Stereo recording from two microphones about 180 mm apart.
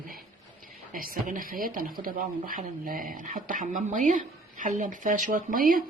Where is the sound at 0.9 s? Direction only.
50° right (ahead or behind).